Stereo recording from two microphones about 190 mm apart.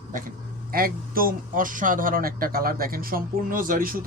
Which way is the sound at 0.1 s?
50° right (ahead or behind).